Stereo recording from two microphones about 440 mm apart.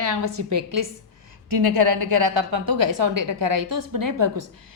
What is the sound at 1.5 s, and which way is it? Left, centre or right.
A woman's voice, right.